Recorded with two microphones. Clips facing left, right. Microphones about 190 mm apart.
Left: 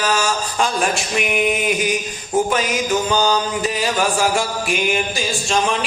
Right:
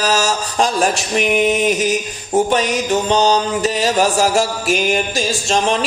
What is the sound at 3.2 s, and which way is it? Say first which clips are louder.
Music: right 4 dB; 35° right (ahead or behind).